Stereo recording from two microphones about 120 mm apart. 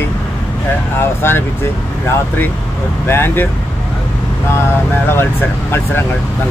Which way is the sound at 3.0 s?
20° left (ahead or behind).